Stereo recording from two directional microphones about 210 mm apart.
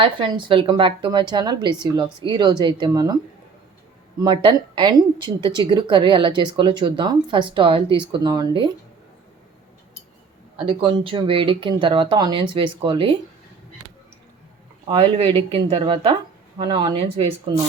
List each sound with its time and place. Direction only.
0.0 s a woman's voice: 25° right (ahead or behind)
4.4 s a woman's voice: 20° right (ahead or behind)
10.7 s a woman's voice: 25° right (ahead or behind)
14.8 s a woman's voice: 25° right (ahead or behind)